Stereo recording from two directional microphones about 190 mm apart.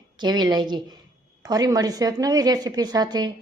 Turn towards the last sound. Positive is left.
turn(degrees=-20)  # may be behind; listen again after turning